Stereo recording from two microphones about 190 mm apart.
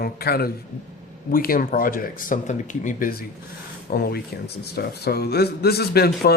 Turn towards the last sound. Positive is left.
turn(degrees=55)  # may be behind; listen again after turning